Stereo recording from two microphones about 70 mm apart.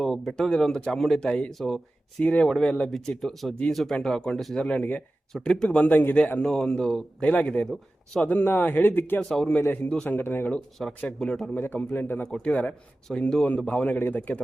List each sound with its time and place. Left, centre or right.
0.0 s a man's voice: centre
1.5 s a man's voice: centre
2.2 s a man's voice: centre
4.6 s a man's voice: centre
5.3 s a man's voice: centre
6.4 s speech: centre
8.4 s a man's voice: left
9.3 s speech: centre
10.1 s a man's voice: left
10.8 s speech: centre
11.6 s a man's voice: left
12.2 s a man's voice: centre